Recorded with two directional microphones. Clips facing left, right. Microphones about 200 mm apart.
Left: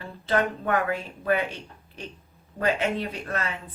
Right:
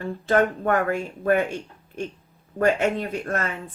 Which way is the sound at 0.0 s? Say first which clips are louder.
Right 5 dB; 45° right (ahead or behind).